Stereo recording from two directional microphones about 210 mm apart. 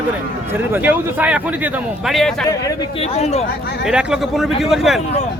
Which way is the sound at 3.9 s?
5° right (ahead or behind).